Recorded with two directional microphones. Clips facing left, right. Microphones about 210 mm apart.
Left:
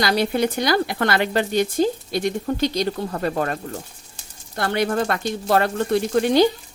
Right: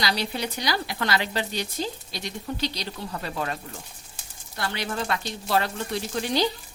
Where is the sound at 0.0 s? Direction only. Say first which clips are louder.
Left 8 dB; 50° left (ahead or behind).